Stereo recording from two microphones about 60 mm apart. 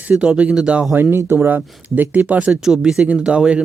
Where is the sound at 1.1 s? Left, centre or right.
Right.